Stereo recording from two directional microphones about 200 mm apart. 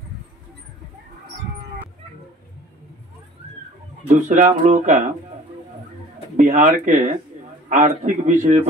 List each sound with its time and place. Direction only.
4.1 s speech: 40° right (ahead or behind)
6.3 s speech: 40° right (ahead or behind)